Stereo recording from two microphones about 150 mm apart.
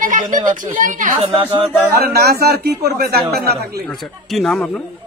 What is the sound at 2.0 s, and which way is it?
Speech, 90° right.